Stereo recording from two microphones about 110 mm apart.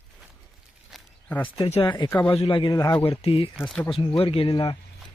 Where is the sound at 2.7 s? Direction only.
35° left (ahead or behind).